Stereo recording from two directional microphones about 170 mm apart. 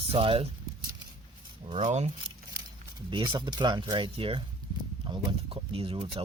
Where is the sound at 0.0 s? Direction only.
35° right (ahead or behind).